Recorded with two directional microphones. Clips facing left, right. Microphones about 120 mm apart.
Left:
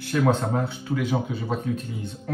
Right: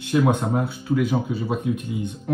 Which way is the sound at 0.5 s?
Centre (ahead or behind).